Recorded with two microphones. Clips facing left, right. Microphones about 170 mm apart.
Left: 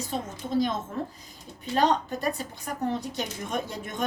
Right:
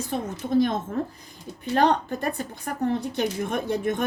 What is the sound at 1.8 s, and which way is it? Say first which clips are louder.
Speech: right 2 dB; 55° right (ahead or behind).